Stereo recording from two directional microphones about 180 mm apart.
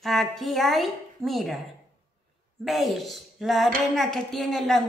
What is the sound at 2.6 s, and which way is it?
Speech, centre (ahead or behind).